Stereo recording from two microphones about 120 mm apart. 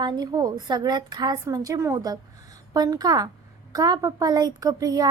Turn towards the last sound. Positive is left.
turn(degrees=-30)  # may be behind; listen again after turning